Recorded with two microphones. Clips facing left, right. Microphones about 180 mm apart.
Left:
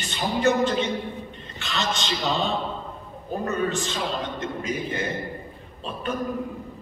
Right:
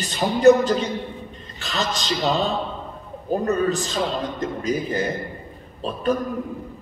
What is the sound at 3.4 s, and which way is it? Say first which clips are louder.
A man's voice: right 3 dB; 35° right (ahead or behind).